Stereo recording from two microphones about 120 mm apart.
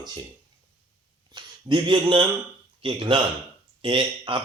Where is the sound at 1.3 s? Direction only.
45° right (ahead or behind).